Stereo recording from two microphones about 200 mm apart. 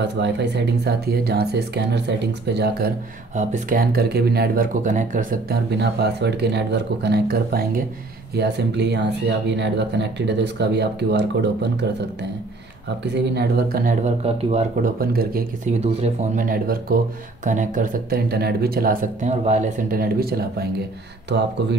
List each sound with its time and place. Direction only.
0.0 s speech: 60° right (ahead or behind)
3.3 s speech: 40° right (ahead or behind); by 11.8 s 55° right (ahead or behind)
13.0 s speech: 60° right (ahead or behind)
14.2 s speech: 30° right (ahead or behind)
15.0 s speech: 45° right (ahead or behind)
15.8 s speech: 35° right (ahead or behind); by 21.5 s 55° right (ahead or behind)